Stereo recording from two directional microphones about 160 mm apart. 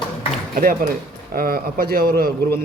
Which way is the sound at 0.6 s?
60° right (ahead or behind).